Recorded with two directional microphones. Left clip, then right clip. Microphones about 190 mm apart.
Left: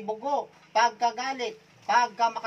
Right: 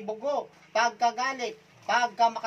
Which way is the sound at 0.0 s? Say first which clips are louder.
Left 1 dB; 35° right (ahead or behind).